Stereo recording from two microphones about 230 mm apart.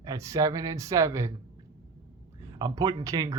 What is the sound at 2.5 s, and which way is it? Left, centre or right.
Speech, centre.